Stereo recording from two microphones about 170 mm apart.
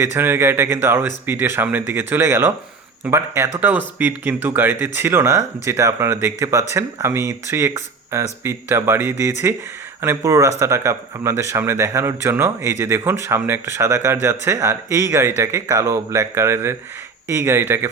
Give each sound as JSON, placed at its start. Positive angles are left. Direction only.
{"t": 0.0, "sound": "speech", "side_deg": -15}